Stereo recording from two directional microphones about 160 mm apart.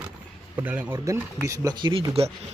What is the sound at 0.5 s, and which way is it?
Speech, 10° right (ahead or behind).